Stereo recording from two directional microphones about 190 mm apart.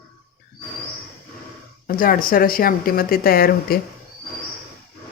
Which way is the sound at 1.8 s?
50° left (ahead or behind).